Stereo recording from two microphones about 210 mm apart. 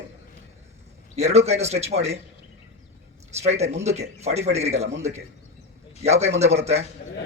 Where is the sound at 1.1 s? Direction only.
30° right (ahead or behind).